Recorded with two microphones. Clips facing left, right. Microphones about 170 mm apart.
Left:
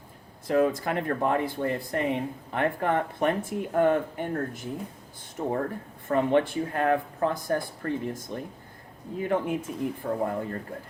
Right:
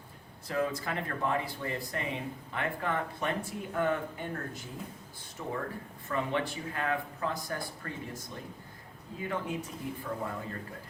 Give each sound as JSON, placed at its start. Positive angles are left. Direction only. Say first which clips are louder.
{"t": 0.4, "sound": "speech", "louder": "left 8 dB", "side_deg": 50}